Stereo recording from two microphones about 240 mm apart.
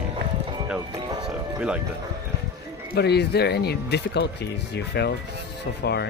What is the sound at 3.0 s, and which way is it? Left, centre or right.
Speech, left.